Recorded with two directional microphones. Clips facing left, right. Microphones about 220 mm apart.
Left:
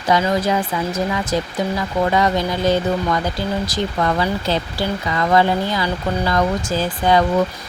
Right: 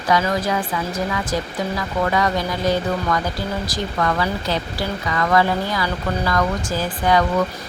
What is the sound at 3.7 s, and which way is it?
Speech, 25° left (ahead or behind).